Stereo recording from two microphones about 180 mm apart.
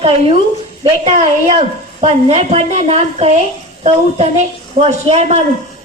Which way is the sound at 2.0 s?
35° right (ahead or behind).